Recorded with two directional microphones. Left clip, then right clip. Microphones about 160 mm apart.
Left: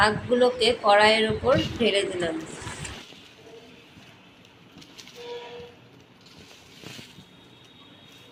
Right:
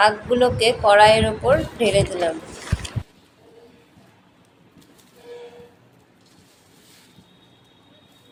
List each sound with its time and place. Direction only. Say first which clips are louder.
0.0 s speech: right 4 dB; 35° right (ahead or behind)